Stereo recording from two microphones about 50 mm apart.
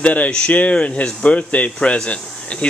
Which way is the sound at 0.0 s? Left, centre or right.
Left.